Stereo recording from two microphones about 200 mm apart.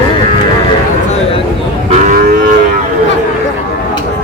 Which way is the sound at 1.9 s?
40° right (ahead or behind).